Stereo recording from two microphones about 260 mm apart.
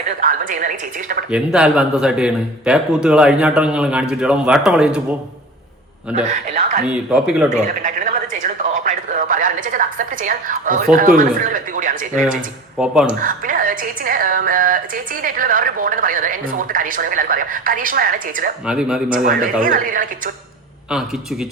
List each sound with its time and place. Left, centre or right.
0.2 s speech: right
1.3 s speech: centre
6.2 s speech: right
6.8 s speech: centre
7.5 s a sound: right
10.9 s speech: right
12.7 s speech: centre
13.1 s speech: right
18.6 s speech: centre
19.1 s speech: right
20.9 s speech: centre